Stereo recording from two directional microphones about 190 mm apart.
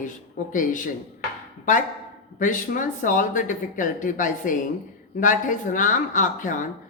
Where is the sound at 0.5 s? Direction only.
45° left (ahead or behind).